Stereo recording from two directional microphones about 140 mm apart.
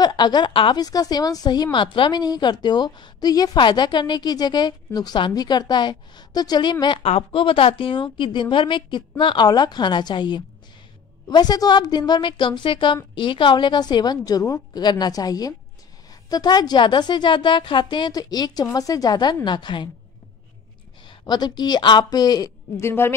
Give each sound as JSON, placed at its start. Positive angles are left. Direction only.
{"t": 0.0, "sound": "a woman's voice", "side_deg": 30}
{"t": 21.1, "sound": "a woman's voice", "side_deg": 30}